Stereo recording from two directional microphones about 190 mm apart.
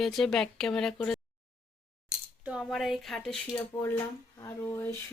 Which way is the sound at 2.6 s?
Centre (ahead or behind).